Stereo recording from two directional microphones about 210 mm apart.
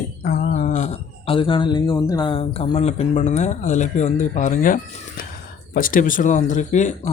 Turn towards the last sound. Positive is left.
turn(degrees=35)  # may be behind; listen again after turning